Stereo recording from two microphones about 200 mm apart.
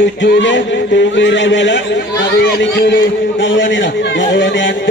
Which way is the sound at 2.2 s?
50° left (ahead or behind).